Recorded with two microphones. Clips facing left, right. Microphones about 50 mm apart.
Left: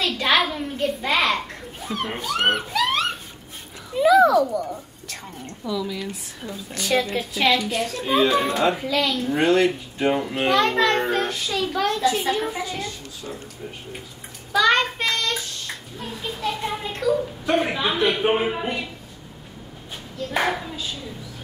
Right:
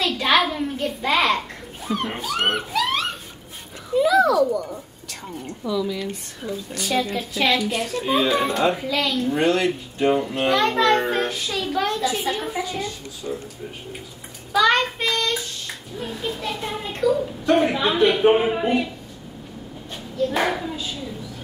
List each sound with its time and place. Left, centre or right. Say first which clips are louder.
0.0 s children playing: right 1 dB; centre
4.1 s a sound: left 4 dB; left
5.5 s a child's voice: right 3 dB; centre
14.5 s a child's voice: even; centre
18.5 s a child's voice: right 5 dB; centre
20.2 s a child's voice: right 2 dB; centre